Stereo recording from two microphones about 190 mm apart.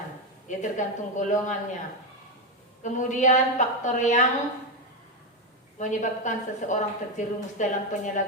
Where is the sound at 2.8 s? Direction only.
40° left (ahead or behind).